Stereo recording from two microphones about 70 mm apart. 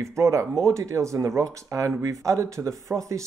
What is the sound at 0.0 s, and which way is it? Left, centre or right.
Speech, right.